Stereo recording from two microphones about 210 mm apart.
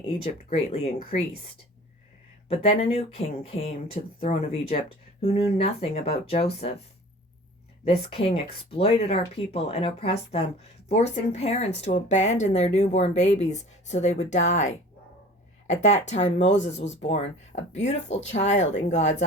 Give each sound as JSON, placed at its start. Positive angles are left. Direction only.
{"t": 0.5, "sound": "speech", "side_deg": 30}
{"t": 2.5, "sound": "speech", "side_deg": 25}
{"t": 7.9, "sound": "a woman's voice", "side_deg": 25}
{"t": 15.8, "sound": "a woman's voice", "side_deg": 30}